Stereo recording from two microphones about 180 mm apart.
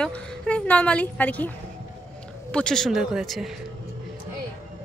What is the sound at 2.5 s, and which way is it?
Speech, 5° left (ahead or behind).